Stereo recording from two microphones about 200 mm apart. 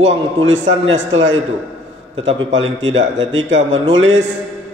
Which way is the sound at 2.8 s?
70° right (ahead or behind).